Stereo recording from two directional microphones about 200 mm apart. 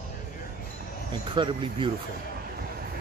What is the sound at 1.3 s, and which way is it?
Speech, 25° right (ahead or behind).